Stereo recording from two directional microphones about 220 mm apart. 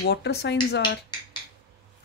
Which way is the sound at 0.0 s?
50° left (ahead or behind).